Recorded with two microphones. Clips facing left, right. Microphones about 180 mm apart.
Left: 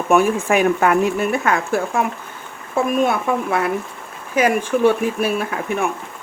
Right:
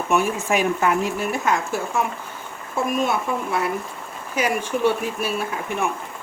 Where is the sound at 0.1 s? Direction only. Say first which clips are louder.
Left 6 dB; 55° left (ahead or behind).